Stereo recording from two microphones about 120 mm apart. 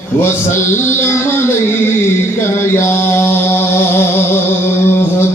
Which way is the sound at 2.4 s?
20° left (ahead or behind).